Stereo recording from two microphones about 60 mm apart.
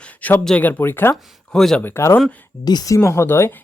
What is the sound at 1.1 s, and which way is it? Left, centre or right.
Speech, centre.